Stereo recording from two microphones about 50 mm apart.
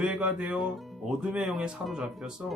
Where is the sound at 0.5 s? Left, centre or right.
Centre.